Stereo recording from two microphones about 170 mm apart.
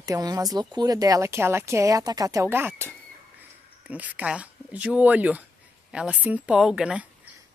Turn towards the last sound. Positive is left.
turn(degrees=-5)  # may be behind; listen again after turning